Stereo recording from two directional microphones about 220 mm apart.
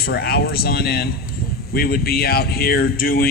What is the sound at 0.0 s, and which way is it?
A man's voice, 45° left (ahead or behind).